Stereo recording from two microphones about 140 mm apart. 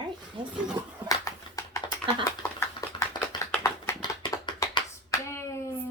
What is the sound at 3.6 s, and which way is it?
Hands, 30° left (ahead or behind).